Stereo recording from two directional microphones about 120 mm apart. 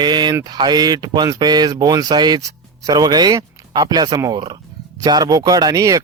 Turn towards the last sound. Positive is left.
turn(degrees=-30)  # may be behind; listen again after turning